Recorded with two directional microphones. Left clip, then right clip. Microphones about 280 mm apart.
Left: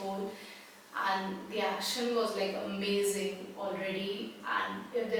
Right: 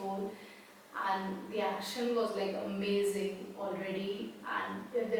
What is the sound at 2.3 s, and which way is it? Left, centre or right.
Music, centre.